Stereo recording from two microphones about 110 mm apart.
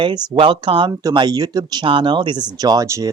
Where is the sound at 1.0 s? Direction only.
35° right (ahead or behind).